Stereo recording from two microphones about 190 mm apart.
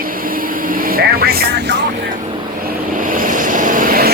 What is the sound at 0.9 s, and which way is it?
Speech, 55° right (ahead or behind).